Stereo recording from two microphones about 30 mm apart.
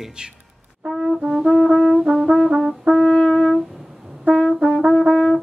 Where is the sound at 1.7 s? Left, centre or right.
Centre.